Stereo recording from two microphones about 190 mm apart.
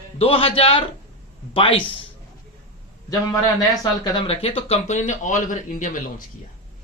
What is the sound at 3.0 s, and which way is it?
Speech, 20° left (ahead or behind).